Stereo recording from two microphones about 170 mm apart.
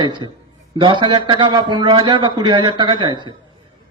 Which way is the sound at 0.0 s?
25° right (ahead or behind).